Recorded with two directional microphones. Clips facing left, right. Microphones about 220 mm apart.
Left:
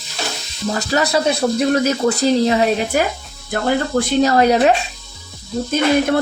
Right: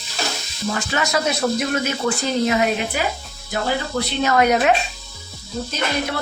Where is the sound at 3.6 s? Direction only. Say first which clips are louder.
Left 6 dB; 50° left (ahead or behind).